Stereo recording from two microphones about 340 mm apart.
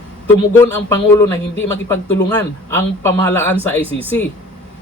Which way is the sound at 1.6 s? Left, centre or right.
Left.